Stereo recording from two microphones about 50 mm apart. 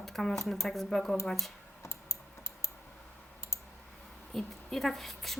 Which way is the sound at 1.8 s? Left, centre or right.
Left.